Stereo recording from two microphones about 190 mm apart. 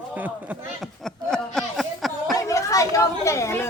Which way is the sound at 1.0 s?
5° left (ahead or behind).